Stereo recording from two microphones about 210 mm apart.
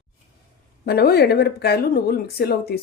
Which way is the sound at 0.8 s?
50° left (ahead or behind).